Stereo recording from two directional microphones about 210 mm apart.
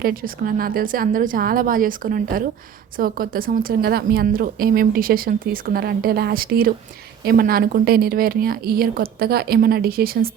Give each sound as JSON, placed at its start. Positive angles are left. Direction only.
{"t": 0.0, "sound": "a woman's voice", "side_deg": -45}